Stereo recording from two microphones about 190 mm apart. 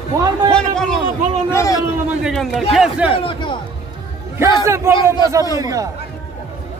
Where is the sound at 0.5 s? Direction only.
5° left (ahead or behind).